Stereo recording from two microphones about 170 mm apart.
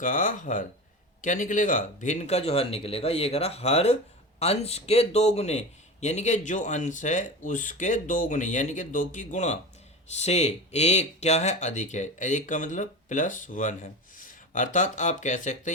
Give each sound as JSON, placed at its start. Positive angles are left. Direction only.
{"t": 0.0, "sound": "a man's voice", "side_deg": 50}